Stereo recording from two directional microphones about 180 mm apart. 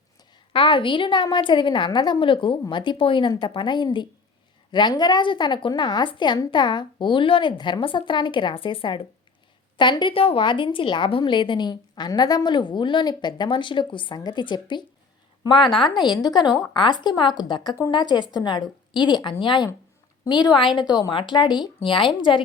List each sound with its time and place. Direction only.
0.5 s a woman's voice: 30° left (ahead or behind)